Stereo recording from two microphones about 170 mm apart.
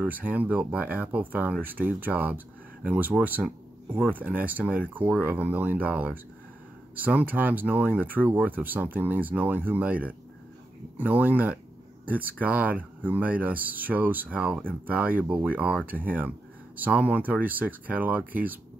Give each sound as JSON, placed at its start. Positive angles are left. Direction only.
{"t": 0.0, "sound": "speech", "side_deg": -10}
{"t": 11.0, "sound": "speech", "side_deg": -10}